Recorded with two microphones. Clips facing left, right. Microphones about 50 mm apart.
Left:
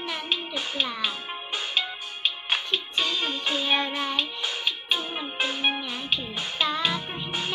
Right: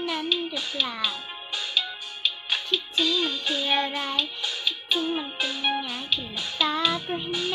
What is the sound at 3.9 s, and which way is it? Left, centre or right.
Speech, left.